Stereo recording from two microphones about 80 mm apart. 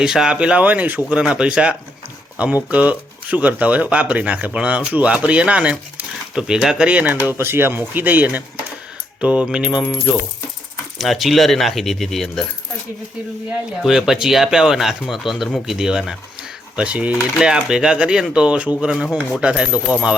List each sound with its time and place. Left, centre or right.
0.0 s speech: centre
6.8 s speech: centre
10.9 s speech: centre
13.8 s speech: centre